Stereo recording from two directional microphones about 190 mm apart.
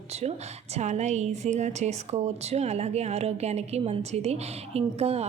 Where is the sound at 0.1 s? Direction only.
35° right (ahead or behind).